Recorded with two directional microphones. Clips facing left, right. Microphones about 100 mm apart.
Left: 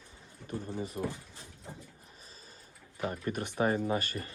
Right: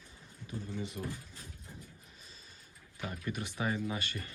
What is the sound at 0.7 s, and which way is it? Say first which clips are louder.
Speech: left 3 dB; 35° left (ahead or behind).